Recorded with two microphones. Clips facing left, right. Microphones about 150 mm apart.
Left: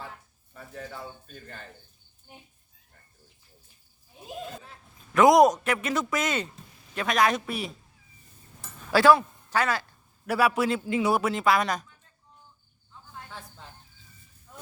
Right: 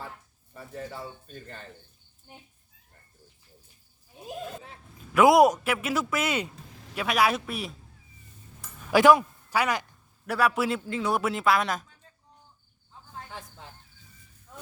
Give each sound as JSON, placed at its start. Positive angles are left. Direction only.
{"t": 1.3, "sound": "a man's voice", "side_deg": 0}
{"t": 5.1, "sound": "a man's voice", "side_deg": -5}
{"t": 6.7, "sound": "a sound", "side_deg": -90}
{"t": 6.9, "sound": "a man's voice", "side_deg": -5}
{"t": 8.9, "sound": "speech", "side_deg": -15}
{"t": 10.2, "sound": "a man's voice", "side_deg": 5}
{"t": 10.8, "sound": "speech", "side_deg": 10}
{"t": 11.2, "sound": "a man's voice", "side_deg": 0}